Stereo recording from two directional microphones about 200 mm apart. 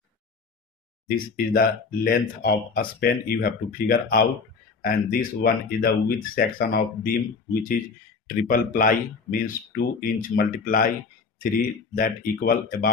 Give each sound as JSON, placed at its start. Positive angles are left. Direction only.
{"t": 1.0, "sound": "speech", "side_deg": 45}
{"t": 8.3, "sound": "speech", "side_deg": 45}
{"t": 11.9, "sound": "speech", "side_deg": 45}